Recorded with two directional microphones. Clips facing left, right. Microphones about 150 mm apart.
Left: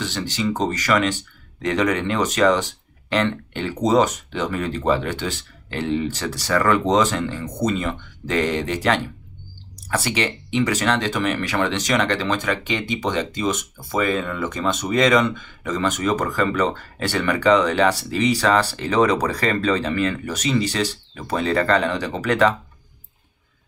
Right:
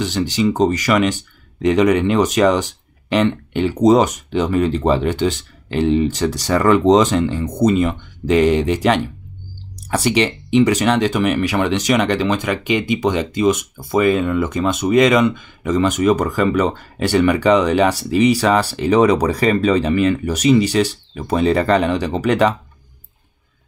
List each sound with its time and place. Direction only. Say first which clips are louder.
0.0 s speech: right 7 dB; 15° right (ahead or behind)